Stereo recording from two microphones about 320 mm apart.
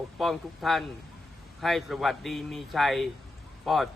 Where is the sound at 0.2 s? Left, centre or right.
Centre.